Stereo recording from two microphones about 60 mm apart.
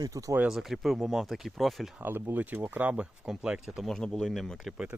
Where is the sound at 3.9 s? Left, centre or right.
Centre.